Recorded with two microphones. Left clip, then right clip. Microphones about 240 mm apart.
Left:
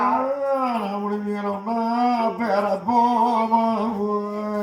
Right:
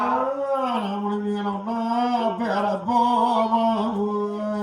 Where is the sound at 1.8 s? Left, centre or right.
Right.